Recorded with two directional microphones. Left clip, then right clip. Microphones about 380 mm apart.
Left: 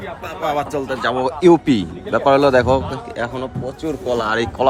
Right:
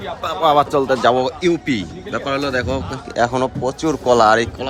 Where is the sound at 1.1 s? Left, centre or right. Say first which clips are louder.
Left 4 dB; centre.